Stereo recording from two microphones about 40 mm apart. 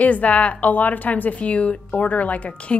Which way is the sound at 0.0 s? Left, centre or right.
Left.